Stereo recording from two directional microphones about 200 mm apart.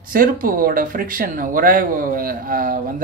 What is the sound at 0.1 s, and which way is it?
Speech, 45° right (ahead or behind).